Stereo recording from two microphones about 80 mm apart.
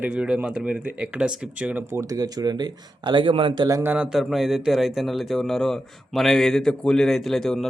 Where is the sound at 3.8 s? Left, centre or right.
Centre.